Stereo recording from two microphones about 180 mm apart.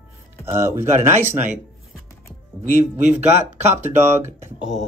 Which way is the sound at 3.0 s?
40° right (ahead or behind).